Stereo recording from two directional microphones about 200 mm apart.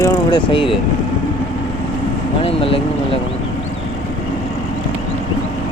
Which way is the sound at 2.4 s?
25° left (ahead or behind).